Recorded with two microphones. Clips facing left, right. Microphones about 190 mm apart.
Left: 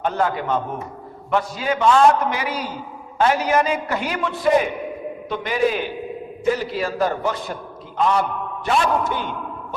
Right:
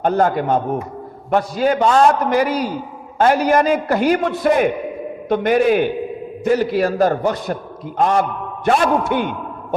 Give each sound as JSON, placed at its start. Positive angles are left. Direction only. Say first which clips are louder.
{"t": 0.0, "sound": "a man's voice", "louder": "right 5 dB", "side_deg": -45}